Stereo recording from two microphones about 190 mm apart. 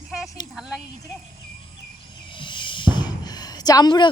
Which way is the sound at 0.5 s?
5° right (ahead or behind).